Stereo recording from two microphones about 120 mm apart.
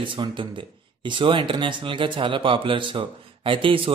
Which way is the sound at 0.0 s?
45° right (ahead or behind).